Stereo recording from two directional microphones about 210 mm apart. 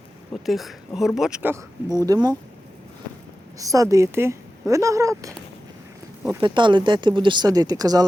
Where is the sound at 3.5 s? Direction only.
15° right (ahead or behind).